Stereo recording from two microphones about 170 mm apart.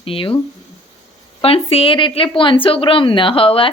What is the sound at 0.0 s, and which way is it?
Speech, 30° left (ahead or behind).